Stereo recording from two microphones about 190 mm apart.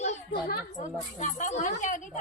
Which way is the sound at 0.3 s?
50° left (ahead or behind).